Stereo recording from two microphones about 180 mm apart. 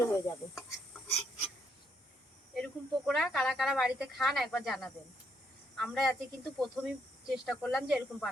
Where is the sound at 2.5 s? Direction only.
Centre (ahead or behind).